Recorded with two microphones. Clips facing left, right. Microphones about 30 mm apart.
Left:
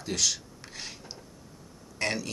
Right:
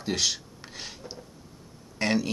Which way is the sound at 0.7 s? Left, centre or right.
Centre.